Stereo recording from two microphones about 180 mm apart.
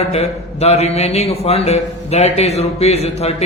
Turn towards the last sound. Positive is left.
turn(degrees=35)  # may be behind; listen again after turning